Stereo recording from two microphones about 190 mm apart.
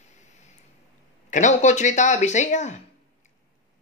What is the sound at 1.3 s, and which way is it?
Speech, 40° left (ahead or behind).